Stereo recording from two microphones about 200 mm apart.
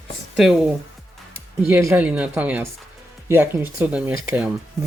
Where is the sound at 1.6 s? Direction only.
10° right (ahead or behind).